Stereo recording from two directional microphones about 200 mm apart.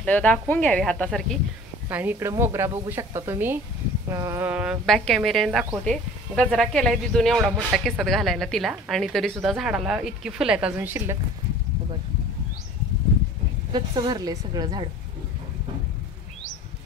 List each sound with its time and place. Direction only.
0.0 s speech: 5° left (ahead or behind)
1.9 s speech: 10° right (ahead or behind)
13.7 s a woman's voice: 20° right (ahead or behind)